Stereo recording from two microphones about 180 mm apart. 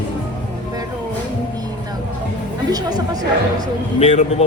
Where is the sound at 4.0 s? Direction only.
40° left (ahead or behind).